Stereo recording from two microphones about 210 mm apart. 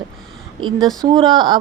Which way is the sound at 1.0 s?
20° right (ahead or behind).